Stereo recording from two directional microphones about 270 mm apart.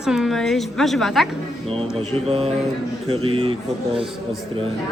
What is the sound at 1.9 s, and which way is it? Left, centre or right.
Mantra, right.